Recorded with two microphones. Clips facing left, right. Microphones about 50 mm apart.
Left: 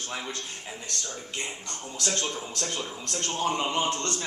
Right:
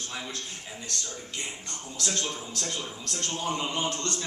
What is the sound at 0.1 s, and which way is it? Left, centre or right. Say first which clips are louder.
Speech: left 4 dB; centre.